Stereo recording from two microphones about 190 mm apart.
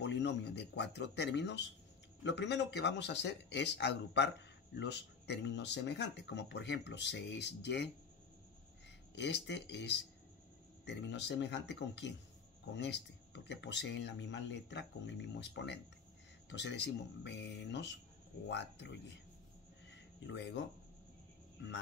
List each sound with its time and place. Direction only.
0.0 s speech: 65° left (ahead or behind)
9.1 s speech: 65° left (ahead or behind)
19.9 s a sound: 65° left (ahead or behind)